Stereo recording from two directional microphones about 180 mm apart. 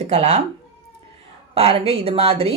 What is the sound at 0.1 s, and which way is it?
Speech, 40° right (ahead or behind).